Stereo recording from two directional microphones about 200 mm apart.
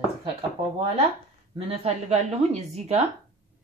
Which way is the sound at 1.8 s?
35° right (ahead or behind).